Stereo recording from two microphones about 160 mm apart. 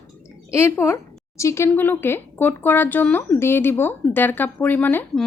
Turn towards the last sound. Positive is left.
turn(degrees=10)  # may be behind; listen again after turning